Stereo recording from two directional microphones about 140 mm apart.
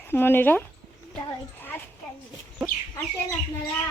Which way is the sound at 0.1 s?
15° left (ahead or behind).